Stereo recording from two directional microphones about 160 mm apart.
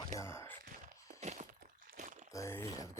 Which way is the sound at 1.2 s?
45° right (ahead or behind).